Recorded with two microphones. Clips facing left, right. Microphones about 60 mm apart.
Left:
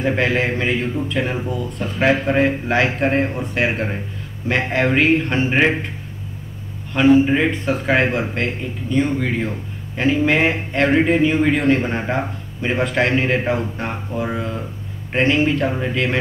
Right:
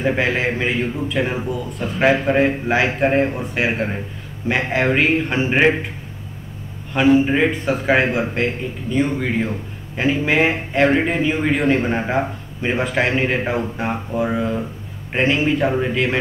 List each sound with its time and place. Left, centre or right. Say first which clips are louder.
0.0 s speech: even; centre
6.9 s speech: left 1 dB; centre